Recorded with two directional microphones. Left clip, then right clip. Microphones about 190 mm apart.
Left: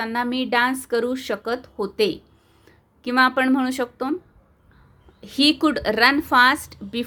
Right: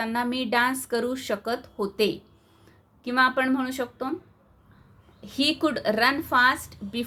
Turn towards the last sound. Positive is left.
turn(degrees=35)  # may be behind; listen again after turning